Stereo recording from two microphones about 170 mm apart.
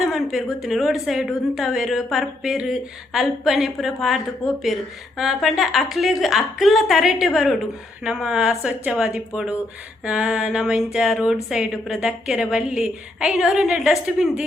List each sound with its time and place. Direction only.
0.1 s a woman's voice: centre (ahead or behind)